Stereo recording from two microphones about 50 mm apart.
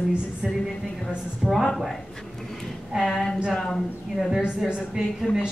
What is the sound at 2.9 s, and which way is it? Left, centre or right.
Speech, centre.